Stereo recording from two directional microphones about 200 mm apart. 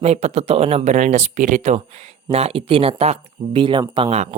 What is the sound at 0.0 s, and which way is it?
Speech, 35° right (ahead or behind).